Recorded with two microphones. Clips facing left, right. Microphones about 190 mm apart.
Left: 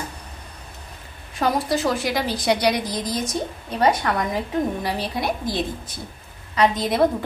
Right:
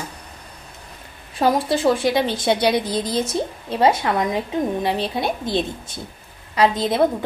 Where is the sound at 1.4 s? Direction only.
30° right (ahead or behind).